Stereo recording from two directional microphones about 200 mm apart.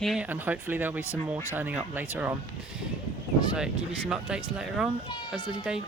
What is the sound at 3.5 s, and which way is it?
Speech, 5° right (ahead or behind).